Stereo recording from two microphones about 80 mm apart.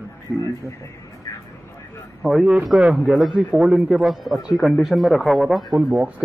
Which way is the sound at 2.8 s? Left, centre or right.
Centre.